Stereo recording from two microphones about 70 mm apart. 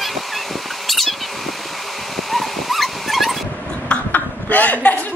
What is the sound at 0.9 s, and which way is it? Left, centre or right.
Cat, centre.